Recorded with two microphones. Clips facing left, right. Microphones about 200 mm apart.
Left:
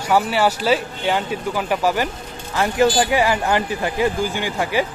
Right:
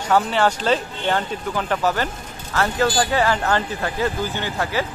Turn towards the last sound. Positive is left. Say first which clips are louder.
# left 3 dB
turn(degrees=15)  # may be behind; listen again after turning